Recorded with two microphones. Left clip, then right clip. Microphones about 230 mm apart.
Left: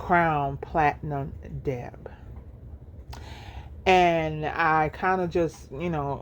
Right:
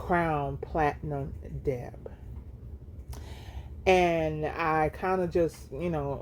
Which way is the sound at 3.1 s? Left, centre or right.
Left.